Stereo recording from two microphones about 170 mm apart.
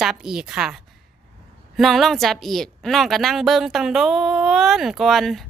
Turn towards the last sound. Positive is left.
turn(degrees=0)  # may be behind; listen again after turning